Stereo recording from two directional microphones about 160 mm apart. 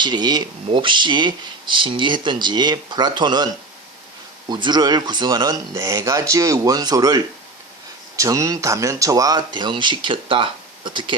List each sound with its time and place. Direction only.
0.0 s speech: 25° right (ahead or behind)